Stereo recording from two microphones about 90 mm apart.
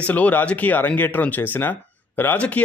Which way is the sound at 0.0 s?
15° left (ahead or behind).